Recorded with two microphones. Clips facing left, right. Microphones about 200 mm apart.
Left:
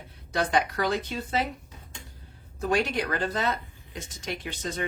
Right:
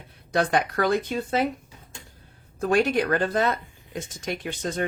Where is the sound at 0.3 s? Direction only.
55° right (ahead or behind).